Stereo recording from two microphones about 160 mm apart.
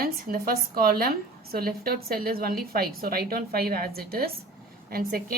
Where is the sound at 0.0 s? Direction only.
65° right (ahead or behind).